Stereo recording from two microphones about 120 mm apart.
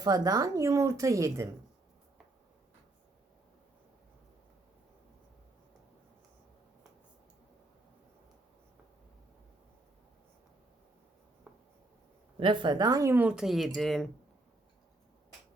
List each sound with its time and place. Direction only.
0.0 s speech: 30° right (ahead or behind)
11.5 s writing: 5° right (ahead or behind)
12.4 s a woman's voice: 40° right (ahead or behind)
13.1 s speech: 10° right (ahead or behind); by 14.1 s 5° left (ahead or behind)